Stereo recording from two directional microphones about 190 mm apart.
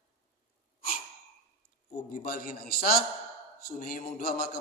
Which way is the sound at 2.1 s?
55° left (ahead or behind).